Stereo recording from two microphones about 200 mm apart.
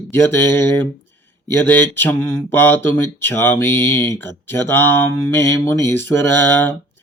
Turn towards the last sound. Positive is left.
turn(degrees=10)  # may be behind; listen again after turning